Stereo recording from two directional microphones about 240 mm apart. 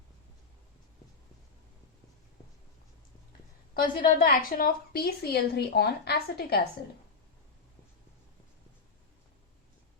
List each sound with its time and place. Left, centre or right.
3.8 s a woman's voice: left